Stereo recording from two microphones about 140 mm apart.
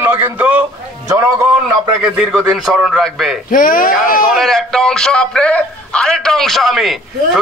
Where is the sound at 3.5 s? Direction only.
75° left (ahead or behind).